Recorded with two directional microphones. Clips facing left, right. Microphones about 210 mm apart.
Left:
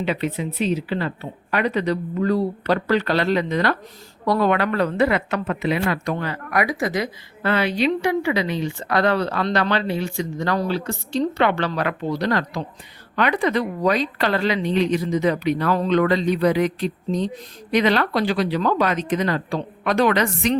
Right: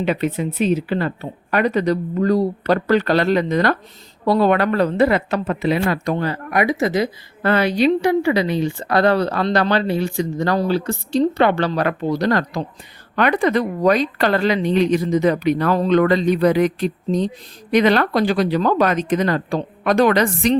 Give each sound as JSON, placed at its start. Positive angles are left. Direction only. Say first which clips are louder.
{"t": 0.0, "sound": "a woman's voice", "louder": "right 4 dB", "side_deg": -50}
{"t": 4.3, "sound": "a woman's voice", "louder": "right 3 dB", "side_deg": -30}
{"t": 4.5, "sound": "speech", "louder": "right 3 dB", "side_deg": -40}
{"t": 7.4, "sound": "a woman's voice", "louder": "right 4 dB", "side_deg": -45}